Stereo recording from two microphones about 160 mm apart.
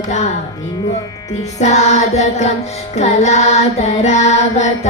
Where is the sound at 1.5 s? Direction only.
45° left (ahead or behind).